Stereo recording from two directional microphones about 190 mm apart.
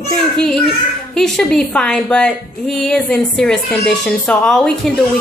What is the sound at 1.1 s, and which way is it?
A woman's voice, centre (ahead or behind).